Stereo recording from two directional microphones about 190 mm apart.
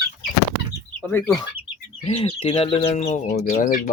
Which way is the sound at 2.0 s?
30° left (ahead or behind).